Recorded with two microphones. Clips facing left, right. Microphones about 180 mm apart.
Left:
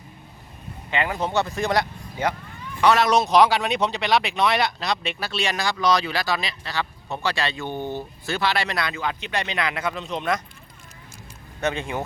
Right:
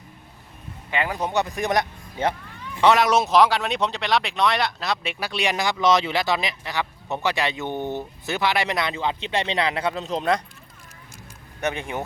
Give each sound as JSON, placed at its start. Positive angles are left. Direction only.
{"t": 0.9, "sound": "speech", "side_deg": -15}
{"t": 3.1, "sound": "speech", "side_deg": -5}
{"t": 11.6, "sound": "speech", "side_deg": -15}